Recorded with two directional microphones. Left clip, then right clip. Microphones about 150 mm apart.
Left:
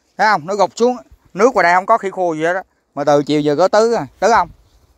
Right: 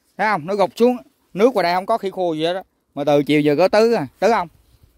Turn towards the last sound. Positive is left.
turn(degrees=-35)  # may be behind; listen again after turning